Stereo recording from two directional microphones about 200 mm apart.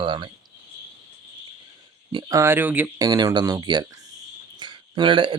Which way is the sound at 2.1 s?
15° right (ahead or behind).